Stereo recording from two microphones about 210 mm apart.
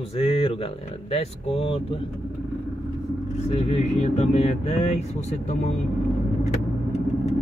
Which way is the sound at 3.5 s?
30° left (ahead or behind).